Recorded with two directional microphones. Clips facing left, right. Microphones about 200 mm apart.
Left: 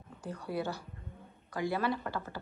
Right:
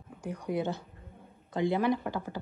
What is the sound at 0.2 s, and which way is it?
A woman's voice, 15° right (ahead or behind).